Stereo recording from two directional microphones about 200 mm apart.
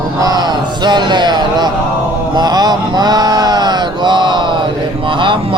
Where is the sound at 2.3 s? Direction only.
20° right (ahead or behind).